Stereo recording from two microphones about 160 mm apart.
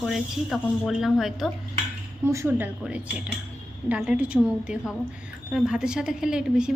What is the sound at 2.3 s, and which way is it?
Speech, 15° right (ahead or behind).